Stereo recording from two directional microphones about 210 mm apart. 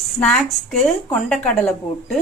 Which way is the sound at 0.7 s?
5° left (ahead or behind).